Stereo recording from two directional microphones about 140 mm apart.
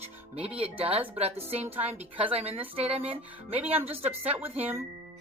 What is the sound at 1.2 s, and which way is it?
A woman's voice, 45° right (ahead or behind).